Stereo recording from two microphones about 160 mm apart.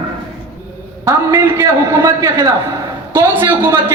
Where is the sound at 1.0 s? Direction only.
20° right (ahead or behind).